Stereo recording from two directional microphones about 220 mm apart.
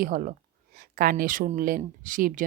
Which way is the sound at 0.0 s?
40° right (ahead or behind).